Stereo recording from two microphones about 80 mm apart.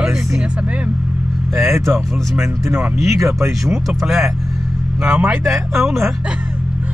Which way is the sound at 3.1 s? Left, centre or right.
Right.